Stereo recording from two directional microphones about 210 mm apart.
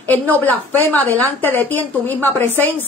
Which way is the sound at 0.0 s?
10° left (ahead or behind).